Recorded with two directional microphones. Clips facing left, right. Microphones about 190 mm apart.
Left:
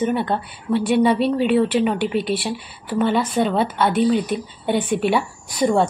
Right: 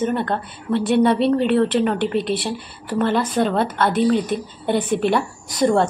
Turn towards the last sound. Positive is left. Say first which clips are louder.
# right 1 dB
turn(degrees=5)  # may be behind; listen again after turning